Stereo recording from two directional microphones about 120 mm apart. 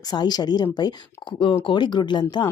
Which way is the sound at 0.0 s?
35° left (ahead or behind).